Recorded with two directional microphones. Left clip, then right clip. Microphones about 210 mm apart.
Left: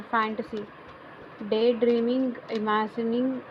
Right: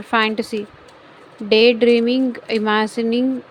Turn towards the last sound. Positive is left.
turn(degrees=-50)  # may be behind; listen again after turning